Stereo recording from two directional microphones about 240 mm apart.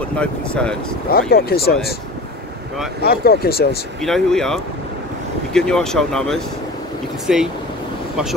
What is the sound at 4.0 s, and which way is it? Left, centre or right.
Speech, centre.